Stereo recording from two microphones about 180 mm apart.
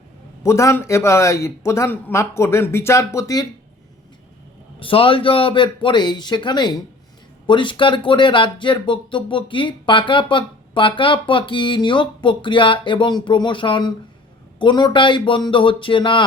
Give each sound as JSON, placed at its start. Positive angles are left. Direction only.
{"t": 0.4, "sound": "a man's voice", "side_deg": 15}
{"t": 4.8, "sound": "speech", "side_deg": 30}